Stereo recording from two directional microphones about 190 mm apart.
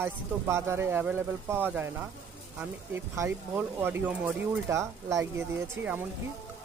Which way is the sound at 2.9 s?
15° right (ahead or behind).